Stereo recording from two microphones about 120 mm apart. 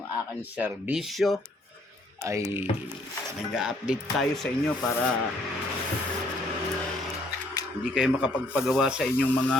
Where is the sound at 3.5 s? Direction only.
5° right (ahead or behind).